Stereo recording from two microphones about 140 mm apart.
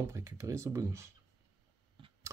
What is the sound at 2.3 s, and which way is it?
Scissors, 20° right (ahead or behind).